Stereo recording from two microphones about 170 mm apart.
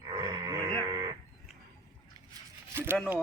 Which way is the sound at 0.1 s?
20° right (ahead or behind).